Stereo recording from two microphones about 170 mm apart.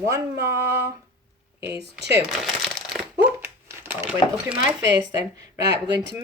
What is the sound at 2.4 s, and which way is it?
Crumpling, centre (ahead or behind).